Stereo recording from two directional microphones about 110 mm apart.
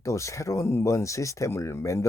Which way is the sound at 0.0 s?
25° left (ahead or behind).